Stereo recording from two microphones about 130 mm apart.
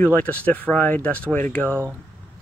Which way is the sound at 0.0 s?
10° left (ahead or behind).